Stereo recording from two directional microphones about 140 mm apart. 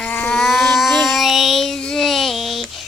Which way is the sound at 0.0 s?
10° left (ahead or behind).